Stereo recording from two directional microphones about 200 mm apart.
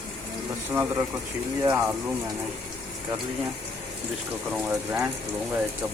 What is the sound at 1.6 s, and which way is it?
Speech, 20° right (ahead or behind).